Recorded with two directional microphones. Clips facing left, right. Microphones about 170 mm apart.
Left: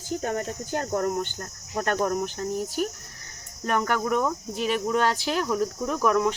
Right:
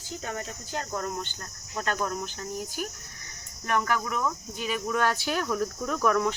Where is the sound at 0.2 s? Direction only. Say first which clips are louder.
Left 7 dB; 50° left (ahead or behind).